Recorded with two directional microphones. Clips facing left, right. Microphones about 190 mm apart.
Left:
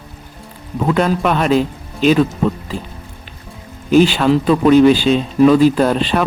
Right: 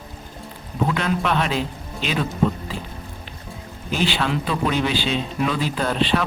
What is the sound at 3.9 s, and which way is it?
A man's voice, 45° left (ahead or behind).